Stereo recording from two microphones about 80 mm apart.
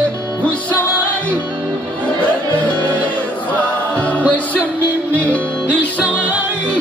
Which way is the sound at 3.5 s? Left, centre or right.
Centre.